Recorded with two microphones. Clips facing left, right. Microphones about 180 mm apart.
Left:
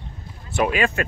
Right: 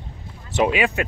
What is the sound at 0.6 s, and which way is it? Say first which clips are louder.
Speech: right 1 dB; 15° right (ahead or behind).